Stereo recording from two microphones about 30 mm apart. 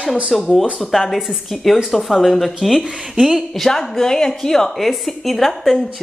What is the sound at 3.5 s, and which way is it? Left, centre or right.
Speech, centre.